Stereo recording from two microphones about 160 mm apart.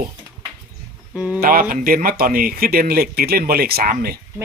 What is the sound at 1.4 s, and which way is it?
Speech, 65° right (ahead or behind).